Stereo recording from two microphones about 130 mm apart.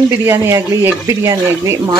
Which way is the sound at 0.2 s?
20° right (ahead or behind).